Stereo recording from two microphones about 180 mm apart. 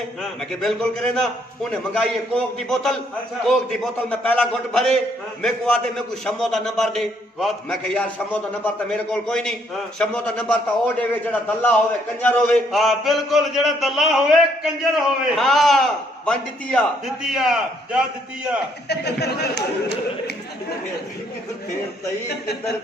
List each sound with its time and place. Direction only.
0.2 s a man's voice: 5° left (ahead or behind)
18.9 s speech: 65° left (ahead or behind)